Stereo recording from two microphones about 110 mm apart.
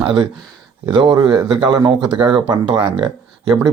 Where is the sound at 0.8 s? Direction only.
50° right (ahead or behind).